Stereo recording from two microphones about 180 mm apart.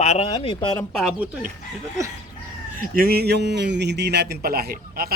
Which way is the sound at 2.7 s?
50° right (ahead or behind).